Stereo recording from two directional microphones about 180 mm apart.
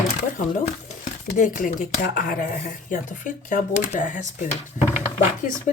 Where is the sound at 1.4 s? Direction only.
45° left (ahead or behind).